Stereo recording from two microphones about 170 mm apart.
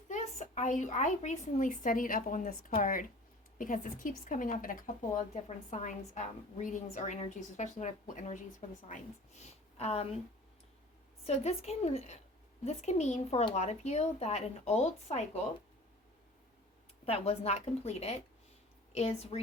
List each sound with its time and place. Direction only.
0.1 s a woman's voice: 45° left (ahead or behind)
11.3 s a woman's voice: 40° left (ahead or behind)
17.1 s a woman's voice: 35° left (ahead or behind)